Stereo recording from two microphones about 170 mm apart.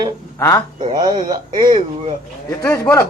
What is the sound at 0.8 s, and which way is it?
Speech, 25° right (ahead or behind).